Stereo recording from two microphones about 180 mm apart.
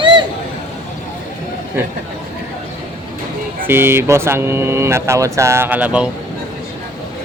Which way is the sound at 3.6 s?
15° right (ahead or behind).